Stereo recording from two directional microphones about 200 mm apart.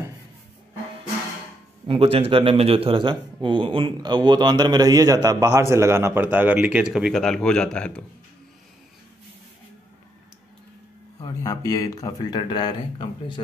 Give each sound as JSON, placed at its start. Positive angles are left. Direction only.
{"t": 1.9, "sound": "speech", "side_deg": -30}
{"t": 11.1, "sound": "speech", "side_deg": 20}